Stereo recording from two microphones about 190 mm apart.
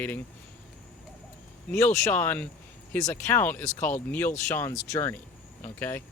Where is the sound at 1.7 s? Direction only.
15° left (ahead or behind).